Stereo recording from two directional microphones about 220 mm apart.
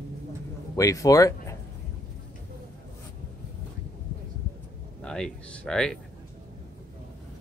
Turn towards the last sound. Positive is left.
turn(degrees=0)  # may be behind; listen again after turning